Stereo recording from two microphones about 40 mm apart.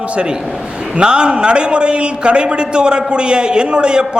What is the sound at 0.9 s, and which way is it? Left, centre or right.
A man's voice, right.